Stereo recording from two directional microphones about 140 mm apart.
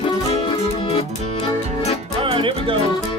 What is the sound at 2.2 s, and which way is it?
Music, 35° right (ahead or behind).